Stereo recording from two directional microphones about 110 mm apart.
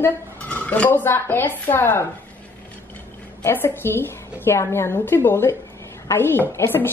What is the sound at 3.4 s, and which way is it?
Speech, 20° left (ahead or behind).